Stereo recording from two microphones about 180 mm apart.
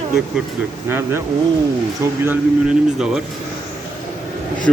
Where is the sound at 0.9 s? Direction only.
15° right (ahead or behind).